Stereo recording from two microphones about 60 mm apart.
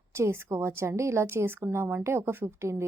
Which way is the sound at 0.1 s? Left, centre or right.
Right.